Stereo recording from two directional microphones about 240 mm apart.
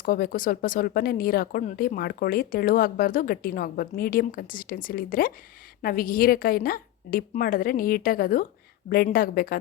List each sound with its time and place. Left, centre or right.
0.0 s speech: left